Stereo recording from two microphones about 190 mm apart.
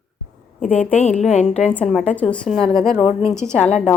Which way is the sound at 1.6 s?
5° left (ahead or behind).